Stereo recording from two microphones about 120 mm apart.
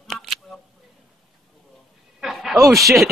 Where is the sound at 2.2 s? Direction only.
Centre (ahead or behind).